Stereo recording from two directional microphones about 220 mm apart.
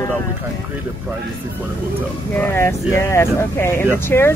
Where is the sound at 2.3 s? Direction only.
10° left (ahead or behind).